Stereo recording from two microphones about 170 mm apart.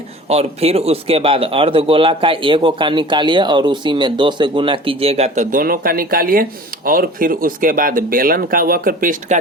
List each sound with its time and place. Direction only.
0.3 s speech: 35° right (ahead or behind); by 9.4 s 55° right (ahead or behind)